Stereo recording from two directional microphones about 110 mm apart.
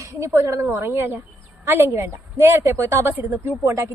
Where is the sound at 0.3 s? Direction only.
25° right (ahead or behind).